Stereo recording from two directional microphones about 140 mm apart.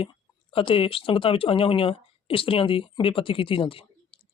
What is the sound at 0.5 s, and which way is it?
Speech, 40° left (ahead or behind).